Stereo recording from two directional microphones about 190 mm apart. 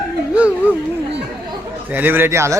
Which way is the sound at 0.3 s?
10° right (ahead or behind).